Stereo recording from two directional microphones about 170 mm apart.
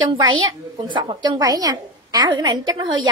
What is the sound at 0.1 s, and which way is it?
A woman's voice, 30° right (ahead or behind).